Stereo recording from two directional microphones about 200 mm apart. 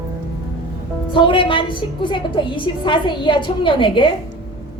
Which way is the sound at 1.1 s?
25° left (ahead or behind).